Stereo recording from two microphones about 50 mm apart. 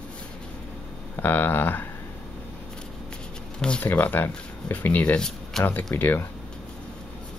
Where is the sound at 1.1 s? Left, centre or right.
Left.